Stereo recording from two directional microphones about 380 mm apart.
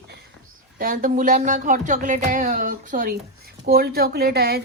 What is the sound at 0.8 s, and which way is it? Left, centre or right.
A woman's voice, right.